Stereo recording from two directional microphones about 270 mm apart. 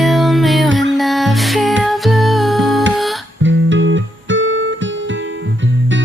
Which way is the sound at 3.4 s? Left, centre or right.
Right.